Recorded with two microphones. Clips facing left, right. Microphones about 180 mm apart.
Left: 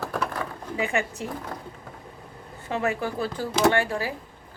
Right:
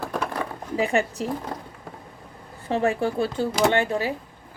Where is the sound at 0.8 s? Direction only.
35° right (ahead or behind).